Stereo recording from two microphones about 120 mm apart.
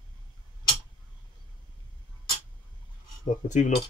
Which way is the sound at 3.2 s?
90° left.